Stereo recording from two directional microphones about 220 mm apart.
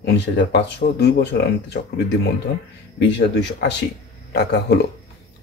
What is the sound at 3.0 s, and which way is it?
Speech, 50° left (ahead or behind).